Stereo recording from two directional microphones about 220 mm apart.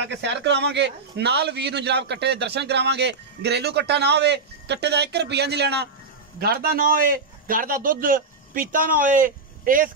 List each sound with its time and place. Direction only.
0.0 s a man's voice: 55° right (ahead or behind); by 9.8 s 40° right (ahead or behind)